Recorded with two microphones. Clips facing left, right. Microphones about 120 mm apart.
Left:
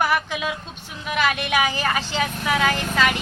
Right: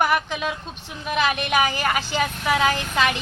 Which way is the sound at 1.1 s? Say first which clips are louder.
Even; 10° right (ahead or behind).